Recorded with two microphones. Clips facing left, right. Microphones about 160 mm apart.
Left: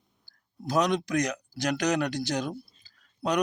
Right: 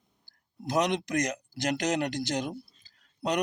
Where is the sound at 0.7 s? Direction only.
20° right (ahead or behind).